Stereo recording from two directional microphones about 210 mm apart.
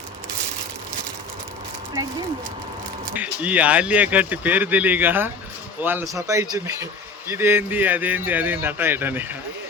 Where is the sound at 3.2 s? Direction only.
5° right (ahead or behind).